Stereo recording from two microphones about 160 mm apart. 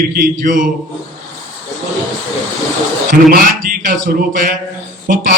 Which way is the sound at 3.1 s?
60° right (ahead or behind).